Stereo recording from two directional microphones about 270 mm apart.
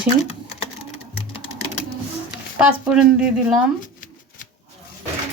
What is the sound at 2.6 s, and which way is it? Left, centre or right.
Speech, centre.